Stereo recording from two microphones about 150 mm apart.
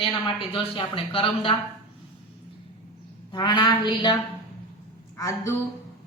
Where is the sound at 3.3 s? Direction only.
30° left (ahead or behind).